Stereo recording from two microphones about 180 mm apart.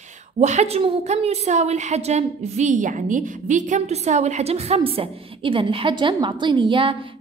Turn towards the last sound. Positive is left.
turn(degrees=-30)  # may be behind; listen again after turning